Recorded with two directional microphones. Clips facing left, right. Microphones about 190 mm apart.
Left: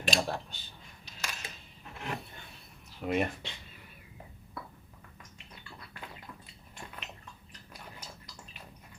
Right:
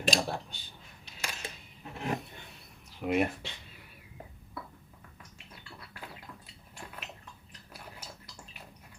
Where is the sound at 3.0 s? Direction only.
10° right (ahead or behind).